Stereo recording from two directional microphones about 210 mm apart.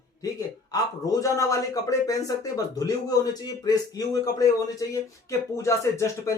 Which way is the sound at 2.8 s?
15° left (ahead or behind).